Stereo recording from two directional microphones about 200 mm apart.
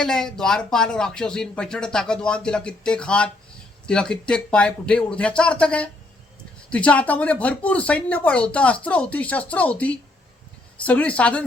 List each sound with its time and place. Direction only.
0.0 s speech: 5° left (ahead or behind)